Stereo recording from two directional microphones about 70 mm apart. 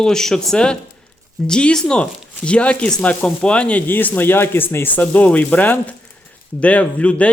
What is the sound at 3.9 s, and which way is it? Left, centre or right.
A man's voice, left.